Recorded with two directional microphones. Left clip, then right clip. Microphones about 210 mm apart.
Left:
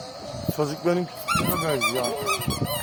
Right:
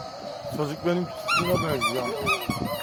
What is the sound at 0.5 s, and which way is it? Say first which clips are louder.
Speech: left 3 dB; centre (ahead or behind).